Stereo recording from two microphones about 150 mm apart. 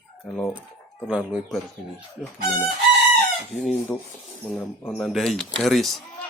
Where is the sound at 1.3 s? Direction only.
5° right (ahead or behind).